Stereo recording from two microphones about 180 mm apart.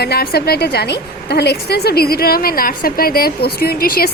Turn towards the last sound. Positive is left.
turn(degrees=55)  # may be behind; listen again after turning